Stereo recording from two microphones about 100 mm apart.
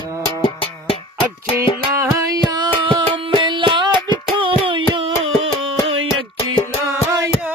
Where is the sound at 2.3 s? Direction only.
45° right (ahead or behind).